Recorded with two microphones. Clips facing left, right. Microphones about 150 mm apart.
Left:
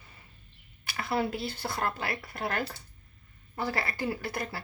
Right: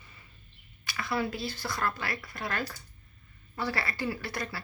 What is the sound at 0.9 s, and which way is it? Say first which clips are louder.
A woman's voice: left 2 dB; 55° left (ahead or behind).